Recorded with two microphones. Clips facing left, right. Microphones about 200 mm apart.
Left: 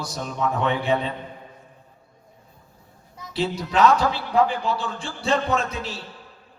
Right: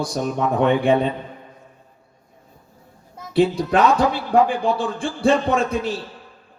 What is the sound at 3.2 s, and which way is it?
A man's voice, 55° right (ahead or behind).